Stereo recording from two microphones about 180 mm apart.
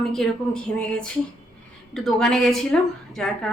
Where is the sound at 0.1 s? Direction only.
5° left (ahead or behind).